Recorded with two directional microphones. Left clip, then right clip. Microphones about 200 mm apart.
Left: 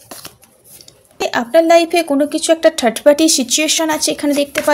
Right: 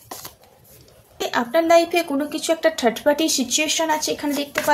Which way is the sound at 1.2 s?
40° left (ahead or behind).